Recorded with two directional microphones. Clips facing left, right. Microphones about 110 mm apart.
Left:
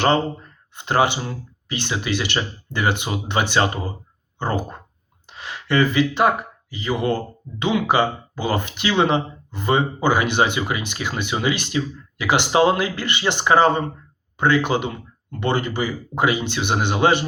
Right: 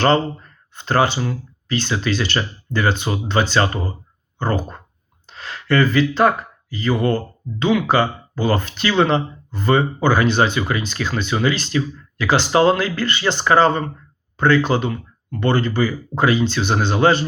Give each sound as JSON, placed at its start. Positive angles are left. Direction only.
{"t": 0.7, "sound": "speech", "side_deg": 15}